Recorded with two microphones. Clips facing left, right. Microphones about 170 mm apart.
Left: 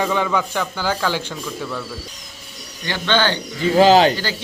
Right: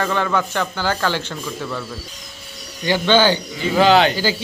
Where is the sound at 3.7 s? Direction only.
35° left (ahead or behind).